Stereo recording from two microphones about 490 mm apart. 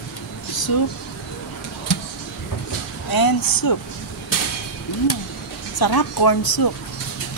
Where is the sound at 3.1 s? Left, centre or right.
Left.